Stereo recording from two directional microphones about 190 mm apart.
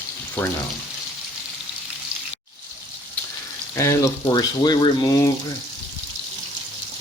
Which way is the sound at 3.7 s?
15° left (ahead or behind).